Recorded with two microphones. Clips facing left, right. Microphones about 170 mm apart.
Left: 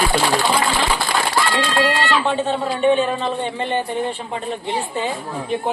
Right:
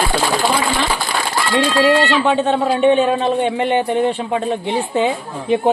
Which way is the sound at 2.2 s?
65° right (ahead or behind).